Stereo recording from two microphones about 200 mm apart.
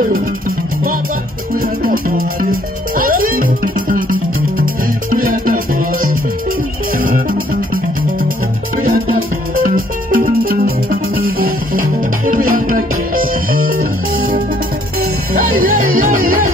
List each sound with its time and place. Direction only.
1.6 s music: 45° right (ahead or behind)
9.6 s music: 45° right (ahead or behind)
16.0 s music: 45° right (ahead or behind)